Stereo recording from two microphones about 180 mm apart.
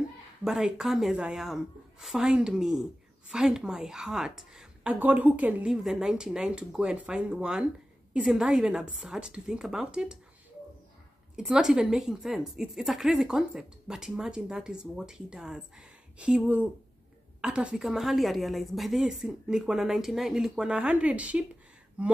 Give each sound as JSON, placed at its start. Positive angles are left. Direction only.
{"t": 0.4, "sound": "a woman's voice", "side_deg": -5}
{"t": 11.3, "sound": "a woman's voice", "side_deg": -5}